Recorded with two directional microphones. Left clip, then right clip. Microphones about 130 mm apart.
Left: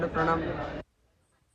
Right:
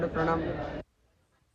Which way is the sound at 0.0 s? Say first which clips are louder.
Left 1 dB; 5° left (ahead or behind).